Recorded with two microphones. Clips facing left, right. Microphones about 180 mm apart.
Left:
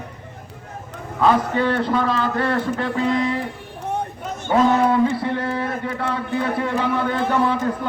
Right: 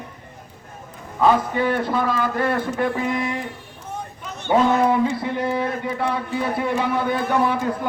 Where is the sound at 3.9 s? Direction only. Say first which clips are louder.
Left 7 dB; 65° left (ahead or behind).